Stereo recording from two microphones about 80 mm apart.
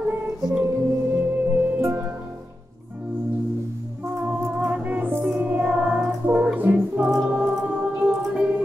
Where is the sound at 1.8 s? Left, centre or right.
Right.